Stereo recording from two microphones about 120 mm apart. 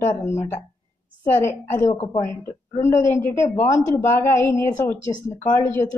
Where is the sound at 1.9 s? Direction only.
85° left.